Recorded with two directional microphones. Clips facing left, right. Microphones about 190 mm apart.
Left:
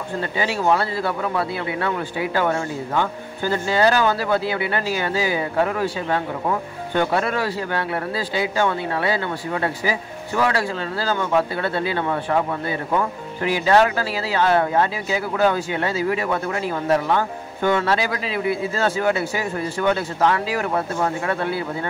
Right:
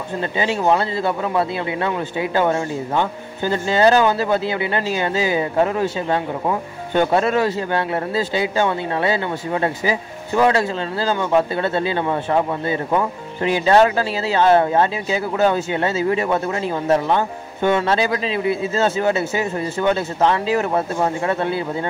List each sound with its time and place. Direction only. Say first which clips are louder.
0.2 s speech: right 3 dB; 20° right (ahead or behind)